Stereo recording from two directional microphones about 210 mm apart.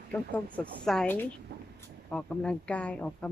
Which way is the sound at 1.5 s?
55° right (ahead or behind).